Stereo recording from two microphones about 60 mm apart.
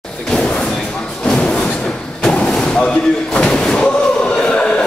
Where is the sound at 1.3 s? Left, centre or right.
Centre.